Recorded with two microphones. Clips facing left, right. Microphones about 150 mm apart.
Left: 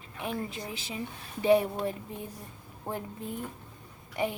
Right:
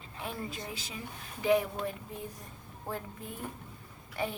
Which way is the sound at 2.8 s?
20° left (ahead or behind).